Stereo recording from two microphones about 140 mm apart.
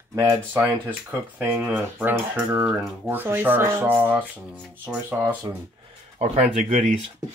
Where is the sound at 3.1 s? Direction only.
15° right (ahead or behind).